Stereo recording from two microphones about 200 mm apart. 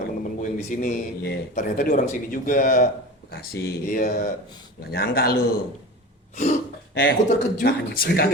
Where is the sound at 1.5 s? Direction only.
45° left (ahead or behind).